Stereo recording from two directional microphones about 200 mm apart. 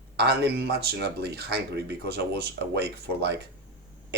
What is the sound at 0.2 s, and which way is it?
Speech, 55° right (ahead or behind).